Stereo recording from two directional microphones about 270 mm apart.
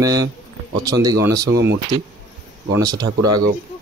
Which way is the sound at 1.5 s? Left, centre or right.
Right.